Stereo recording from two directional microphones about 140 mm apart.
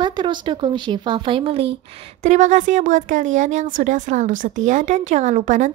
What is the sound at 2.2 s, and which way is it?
A woman's voice, 60° right (ahead or behind).